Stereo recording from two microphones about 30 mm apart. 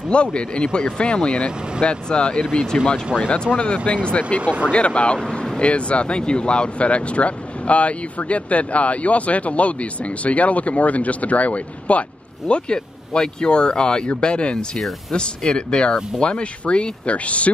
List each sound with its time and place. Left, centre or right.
0.1 s speech: left
12.7 s speech: left
14.8 s speech: centre
15.1 s speech: left